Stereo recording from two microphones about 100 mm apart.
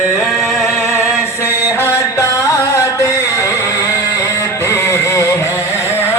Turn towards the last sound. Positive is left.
turn(degrees=25)  # may be behind; listen again after turning